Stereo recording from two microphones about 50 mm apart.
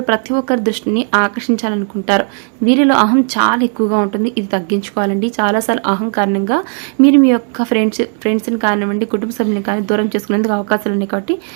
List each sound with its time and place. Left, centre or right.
0.0 s speech: centre